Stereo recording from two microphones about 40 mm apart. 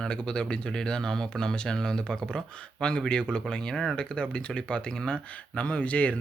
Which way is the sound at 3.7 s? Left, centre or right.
Centre.